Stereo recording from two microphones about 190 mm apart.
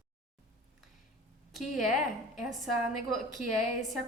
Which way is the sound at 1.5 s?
Centre (ahead or behind).